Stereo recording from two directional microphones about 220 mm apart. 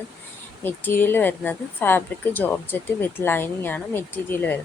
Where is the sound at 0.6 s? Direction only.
10° left (ahead or behind).